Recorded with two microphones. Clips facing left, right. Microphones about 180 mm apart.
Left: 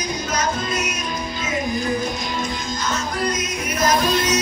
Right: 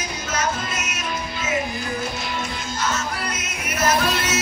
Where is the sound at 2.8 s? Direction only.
35° left (ahead or behind).